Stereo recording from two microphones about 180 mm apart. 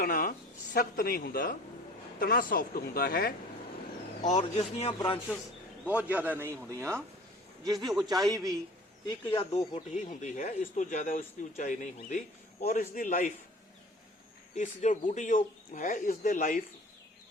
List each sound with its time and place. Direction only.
0.0 s speech: 50° left (ahead or behind)
4.2 s speech: 40° left (ahead or behind)
5.8 s a man's voice: 10° right (ahead or behind)
7.9 s a man's voice: centre (ahead or behind)
8.1 s a man's voice: 20° right (ahead or behind)
9.3 s speech: 35° left (ahead or behind)
14.5 s speech: 45° left (ahead or behind)